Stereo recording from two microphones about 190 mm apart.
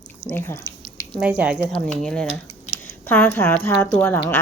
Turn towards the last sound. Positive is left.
turn(degrees=10)  # may be behind; listen again after turning